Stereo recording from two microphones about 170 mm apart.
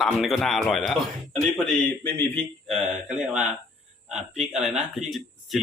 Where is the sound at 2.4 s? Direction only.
Centre (ahead or behind).